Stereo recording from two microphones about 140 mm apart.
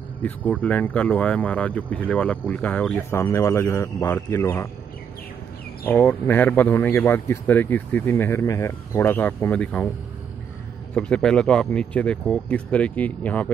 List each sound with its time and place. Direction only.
0.2 s a man's voice: 10° left (ahead or behind)
3.0 s speech: 20° left (ahead or behind)
5.9 s a man's voice: 15° left (ahead or behind)
11.0 s a man's voice: 5° left (ahead or behind)